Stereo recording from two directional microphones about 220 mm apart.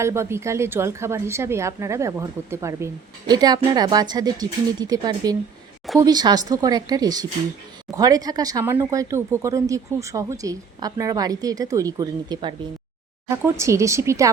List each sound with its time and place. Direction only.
0.0 s a woman's voice: 10° right (ahead or behind)